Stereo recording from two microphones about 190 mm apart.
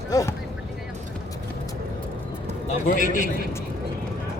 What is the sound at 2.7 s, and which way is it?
Speech, 40° left (ahead or behind).